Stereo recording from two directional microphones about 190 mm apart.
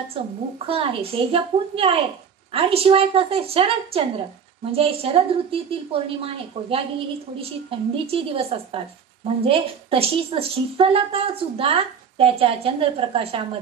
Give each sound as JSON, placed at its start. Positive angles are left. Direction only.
{"t": 0.1, "sound": "a woman's voice", "side_deg": -30}